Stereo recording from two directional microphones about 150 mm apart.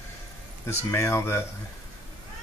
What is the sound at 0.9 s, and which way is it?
Speech, 15° left (ahead or behind).